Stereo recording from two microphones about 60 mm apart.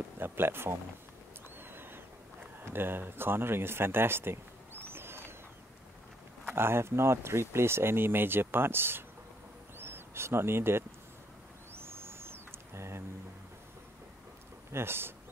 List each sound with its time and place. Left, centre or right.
0.2 s speech: right
1.6 s a sound: right
2.7 s speech: right
6.5 s speech: right
11.7 s a sound: right
14.7 s speech: right